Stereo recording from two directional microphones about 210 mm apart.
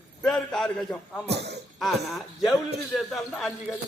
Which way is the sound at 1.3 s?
55° right (ahead or behind).